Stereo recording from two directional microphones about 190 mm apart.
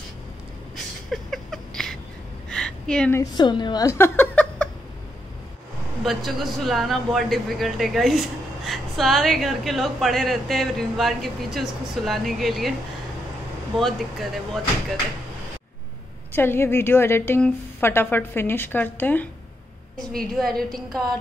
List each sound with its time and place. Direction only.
1.1 s a sound: centre (ahead or behind)
3.2 s a woman's voice: 20° left (ahead or behind)
6.0 s speech: centre (ahead or behind)
13.7 s speech: centre (ahead or behind)
16.3 s a woman's voice: 10° left (ahead or behind)